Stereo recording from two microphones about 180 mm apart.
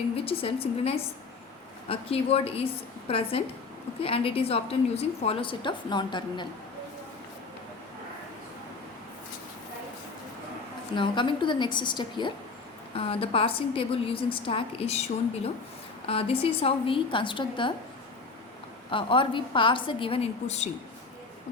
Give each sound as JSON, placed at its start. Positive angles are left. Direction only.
{"t": 0.3, "sound": "a woman's voice", "side_deg": 30}
{"t": 10.9, "sound": "a woman's voice", "side_deg": 25}
{"t": 16.0, "sound": "a woman's voice", "side_deg": 30}
{"t": 18.9, "sound": "a woman's voice", "side_deg": 30}